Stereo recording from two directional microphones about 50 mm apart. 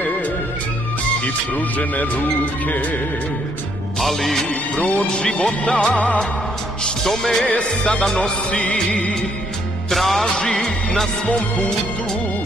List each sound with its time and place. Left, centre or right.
1.2 s speech: left
4.0 s music: centre
4.5 s music of bollywood: centre
5.0 s speech: centre
9.8 s music: centre
11.2 s speech: centre